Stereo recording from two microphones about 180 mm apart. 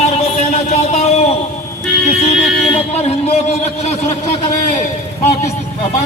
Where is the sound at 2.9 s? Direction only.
35° left (ahead or behind).